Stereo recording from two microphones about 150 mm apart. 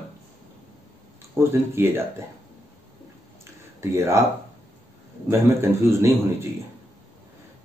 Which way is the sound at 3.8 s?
20° right (ahead or behind).